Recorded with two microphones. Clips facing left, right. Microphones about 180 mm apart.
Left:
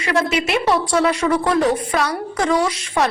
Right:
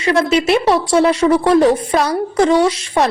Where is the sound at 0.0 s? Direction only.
30° right (ahead or behind).